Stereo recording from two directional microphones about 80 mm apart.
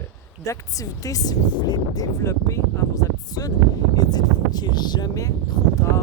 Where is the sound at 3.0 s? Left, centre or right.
Left.